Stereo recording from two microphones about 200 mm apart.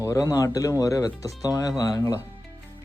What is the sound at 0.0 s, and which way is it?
Speech, 15° left (ahead or behind).